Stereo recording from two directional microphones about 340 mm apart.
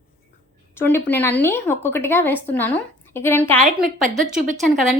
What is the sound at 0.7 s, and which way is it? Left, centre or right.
Speech, centre.